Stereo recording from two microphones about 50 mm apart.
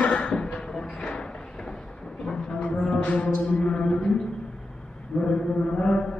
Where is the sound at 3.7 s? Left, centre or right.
Centre.